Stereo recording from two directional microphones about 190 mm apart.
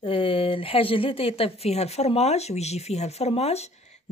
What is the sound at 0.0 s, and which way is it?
Speech, 30° left (ahead or behind).